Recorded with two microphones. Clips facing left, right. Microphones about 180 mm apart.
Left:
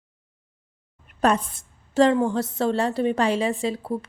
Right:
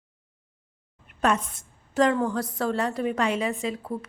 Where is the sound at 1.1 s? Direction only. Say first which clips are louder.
Left 3 dB; 35° left (ahead or behind).